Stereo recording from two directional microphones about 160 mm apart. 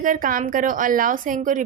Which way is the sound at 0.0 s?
60° right (ahead or behind).